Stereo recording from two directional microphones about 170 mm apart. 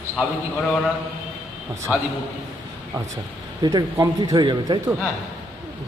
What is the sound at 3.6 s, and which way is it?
A man's voice, 20° right (ahead or behind).